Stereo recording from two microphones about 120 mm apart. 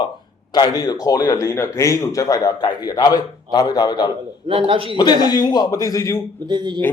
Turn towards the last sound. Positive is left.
turn(degrees=-40)  # may be behind; listen again after turning